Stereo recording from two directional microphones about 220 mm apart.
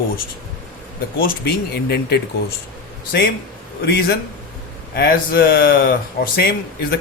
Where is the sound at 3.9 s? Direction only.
45° left (ahead or behind).